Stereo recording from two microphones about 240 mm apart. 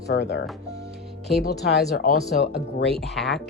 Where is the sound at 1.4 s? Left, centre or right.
Left.